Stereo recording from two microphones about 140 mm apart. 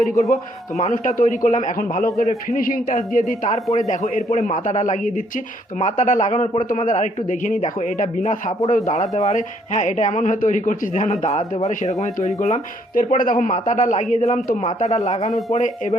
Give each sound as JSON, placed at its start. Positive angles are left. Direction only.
{"t": 0.8, "sound": "a man's voice", "side_deg": 55}
{"t": 12.9, "sound": "a man's voice", "side_deg": 75}
{"t": 15.3, "sound": "speech", "side_deg": 0}
{"t": 15.5, "sound": "a man's voice", "side_deg": 55}